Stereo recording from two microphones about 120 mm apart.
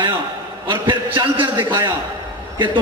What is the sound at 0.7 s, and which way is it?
A man's voice, 40° right (ahead or behind).